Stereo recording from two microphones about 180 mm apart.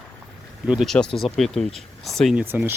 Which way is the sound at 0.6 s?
5° right (ahead or behind).